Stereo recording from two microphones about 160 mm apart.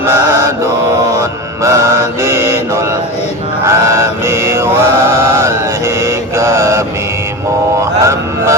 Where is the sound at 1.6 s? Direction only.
20° right (ahead or behind).